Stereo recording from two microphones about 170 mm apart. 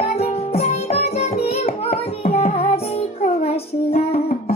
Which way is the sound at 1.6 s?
35° left (ahead or behind).